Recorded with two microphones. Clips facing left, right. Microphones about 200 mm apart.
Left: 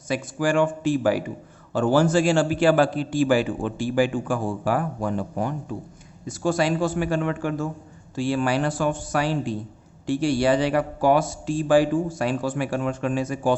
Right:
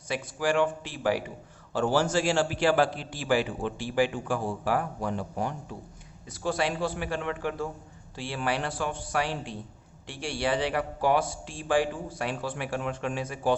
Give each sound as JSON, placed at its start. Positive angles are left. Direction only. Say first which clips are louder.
{"t": 0.1, "sound": "a man's voice", "louder": "left 5 dB", "side_deg": 45}